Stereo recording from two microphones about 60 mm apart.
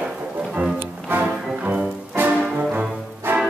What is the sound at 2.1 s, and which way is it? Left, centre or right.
Music, right.